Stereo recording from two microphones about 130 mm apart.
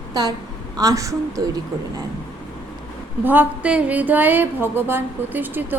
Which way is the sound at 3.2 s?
10° right (ahead or behind).